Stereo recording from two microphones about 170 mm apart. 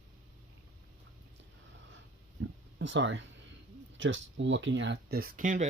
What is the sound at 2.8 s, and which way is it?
Speech, 90° right.